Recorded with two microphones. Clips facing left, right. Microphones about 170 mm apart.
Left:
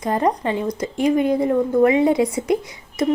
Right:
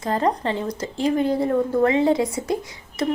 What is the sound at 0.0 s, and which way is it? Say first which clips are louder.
A woman's voice: left 2 dB; 15° left (ahead or behind).